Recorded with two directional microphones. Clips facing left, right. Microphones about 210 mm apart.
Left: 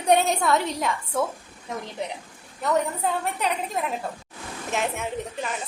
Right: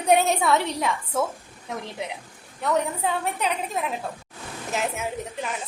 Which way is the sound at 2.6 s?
Centre (ahead or behind).